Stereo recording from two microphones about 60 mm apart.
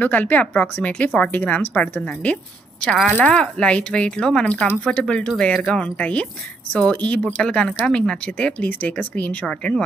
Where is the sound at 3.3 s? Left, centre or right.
Centre.